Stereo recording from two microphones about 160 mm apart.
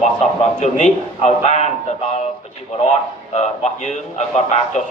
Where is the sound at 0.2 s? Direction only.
45° left (ahead or behind).